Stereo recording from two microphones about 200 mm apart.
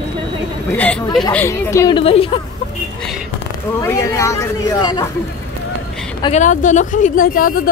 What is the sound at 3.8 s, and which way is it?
Speech, 15° left (ahead or behind).